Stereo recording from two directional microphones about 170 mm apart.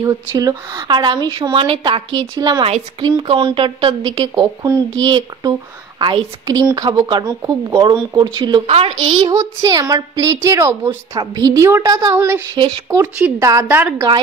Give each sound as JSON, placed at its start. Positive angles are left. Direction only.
{"t": 0.0, "sound": "speech", "side_deg": -20}
{"t": 9.3, "sound": "a woman's voice", "side_deg": -20}